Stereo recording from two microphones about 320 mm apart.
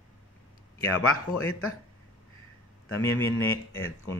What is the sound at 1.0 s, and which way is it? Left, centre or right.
Speech, left.